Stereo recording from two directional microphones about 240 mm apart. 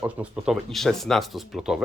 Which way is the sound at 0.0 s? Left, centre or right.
Centre.